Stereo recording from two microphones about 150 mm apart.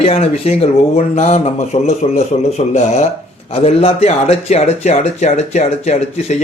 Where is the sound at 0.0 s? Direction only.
45° left (ahead or behind).